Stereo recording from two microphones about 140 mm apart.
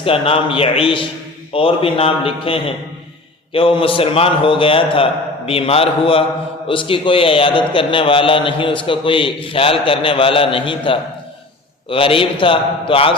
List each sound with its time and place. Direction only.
0.0 s a man's voice: 40° left (ahead or behind)